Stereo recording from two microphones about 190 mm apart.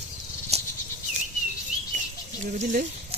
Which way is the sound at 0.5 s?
35° right (ahead or behind).